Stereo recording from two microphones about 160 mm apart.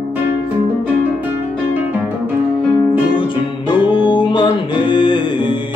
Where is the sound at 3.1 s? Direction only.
30° left (ahead or behind).